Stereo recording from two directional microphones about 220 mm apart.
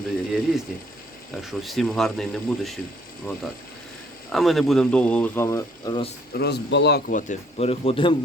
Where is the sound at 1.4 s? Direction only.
Centre (ahead or behind).